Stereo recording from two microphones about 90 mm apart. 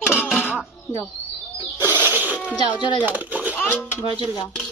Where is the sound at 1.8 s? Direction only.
20° right (ahead or behind).